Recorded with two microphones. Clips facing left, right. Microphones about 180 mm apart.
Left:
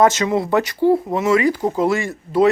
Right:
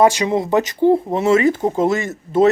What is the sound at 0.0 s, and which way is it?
Speech, 15° right (ahead or behind).